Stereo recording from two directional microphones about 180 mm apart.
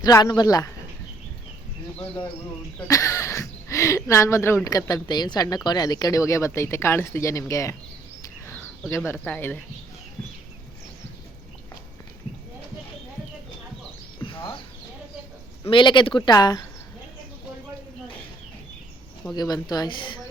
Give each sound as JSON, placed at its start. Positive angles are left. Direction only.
{"t": 0.0, "sound": "speech", "side_deg": 20}
{"t": 2.7, "sound": "speech", "side_deg": 15}
{"t": 8.2, "sound": "a sound", "side_deg": 15}
{"t": 9.0, "sound": "speech", "side_deg": 10}
{"t": 15.7, "sound": "speech", "side_deg": 25}
{"t": 19.3, "sound": "speech", "side_deg": 20}